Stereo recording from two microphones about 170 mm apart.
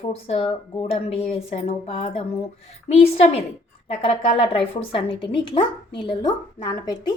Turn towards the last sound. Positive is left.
turn(degrees=25)  # may be behind; listen again after turning